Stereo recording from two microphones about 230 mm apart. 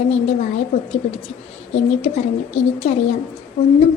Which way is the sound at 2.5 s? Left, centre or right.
Left.